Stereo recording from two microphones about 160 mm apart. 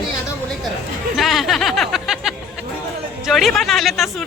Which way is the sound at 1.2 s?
Centre (ahead or behind).